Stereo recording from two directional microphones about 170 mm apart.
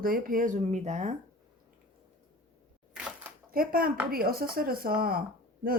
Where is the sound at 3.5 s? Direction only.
60° right (ahead or behind).